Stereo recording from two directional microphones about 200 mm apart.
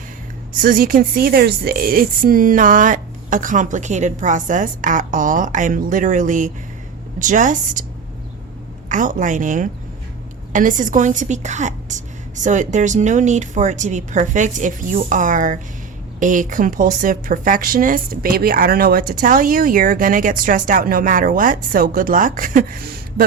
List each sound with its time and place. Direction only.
0.5 s a woman's voice: 45° right (ahead or behind)
8.9 s a woman's voice: 40° right (ahead or behind)